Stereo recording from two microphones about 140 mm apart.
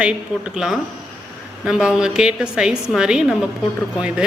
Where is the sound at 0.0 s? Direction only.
5° right (ahead or behind).